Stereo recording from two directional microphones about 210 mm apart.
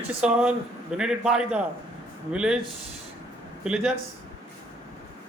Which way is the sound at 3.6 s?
5° right (ahead or behind).